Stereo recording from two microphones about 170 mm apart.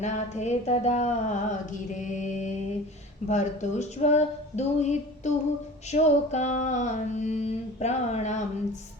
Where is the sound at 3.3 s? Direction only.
45° left (ahead or behind).